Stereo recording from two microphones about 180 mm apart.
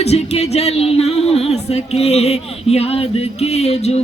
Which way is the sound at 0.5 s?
35° left (ahead or behind).